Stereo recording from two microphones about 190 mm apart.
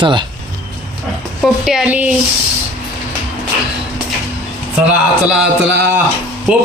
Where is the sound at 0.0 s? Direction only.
25° right (ahead or behind).